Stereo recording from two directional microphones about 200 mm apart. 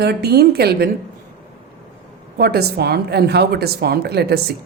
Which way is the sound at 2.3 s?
50° right (ahead or behind).